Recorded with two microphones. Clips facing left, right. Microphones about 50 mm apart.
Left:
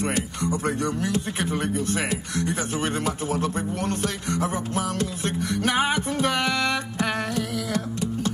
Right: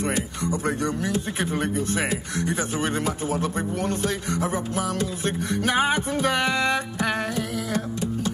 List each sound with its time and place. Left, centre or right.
0.0 s speech: left
0.7 s a man's voice: right
3.9 s speech: left
5.7 s music: right